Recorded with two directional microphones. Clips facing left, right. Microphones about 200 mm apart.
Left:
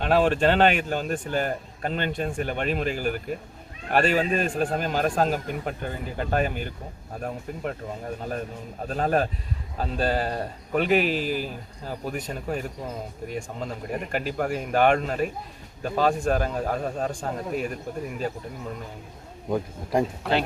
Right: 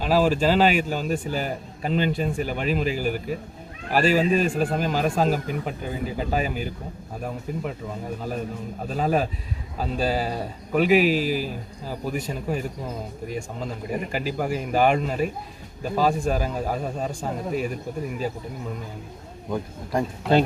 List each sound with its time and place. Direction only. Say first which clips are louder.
0.0 s a man's voice: even; centre (ahead or behind)
8.9 s a man's voice: even; 5° right (ahead or behind)
19.5 s speech: left 2 dB; 15° left (ahead or behind)